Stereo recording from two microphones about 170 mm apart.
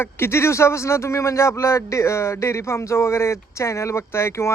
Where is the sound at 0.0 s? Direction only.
15° left (ahead or behind).